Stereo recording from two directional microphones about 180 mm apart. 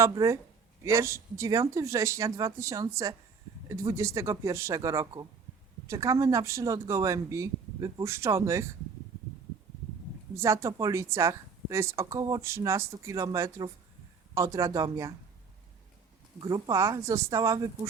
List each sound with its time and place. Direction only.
0.0 s speech: 20° right (ahead or behind)
10.3 s speech: 15° right (ahead or behind)
16.4 s speech: 20° right (ahead or behind)